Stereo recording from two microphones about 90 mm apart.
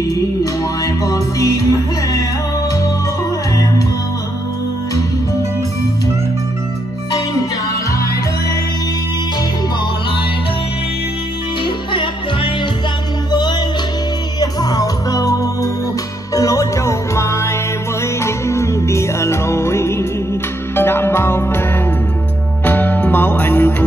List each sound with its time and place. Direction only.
0.1 s music: 40° left (ahead or behind)
11.6 s music: 65° left (ahead or behind)
13.3 s music: 55° left (ahead or behind); by 21.6 s 25° left (ahead or behind)
22.7 s music: 20° left (ahead or behind)